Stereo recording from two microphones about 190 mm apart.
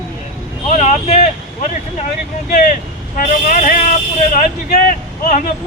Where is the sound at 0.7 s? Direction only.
35° left (ahead or behind).